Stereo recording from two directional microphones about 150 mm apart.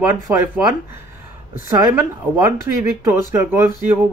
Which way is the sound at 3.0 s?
15° right (ahead or behind).